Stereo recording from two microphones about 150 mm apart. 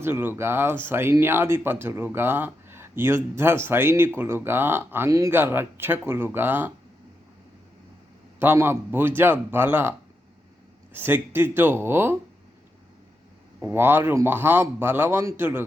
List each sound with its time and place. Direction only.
0.0 s speech: 15° right (ahead or behind)
8.4 s speech: 15° right (ahead or behind)
10.9 s speech: 15° right (ahead or behind)
13.6 s speech: 15° right (ahead or behind)